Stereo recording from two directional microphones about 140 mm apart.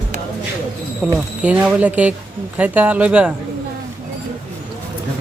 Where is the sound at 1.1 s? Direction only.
10° right (ahead or behind).